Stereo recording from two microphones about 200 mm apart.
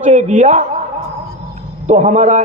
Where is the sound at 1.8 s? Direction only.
35° right (ahead or behind).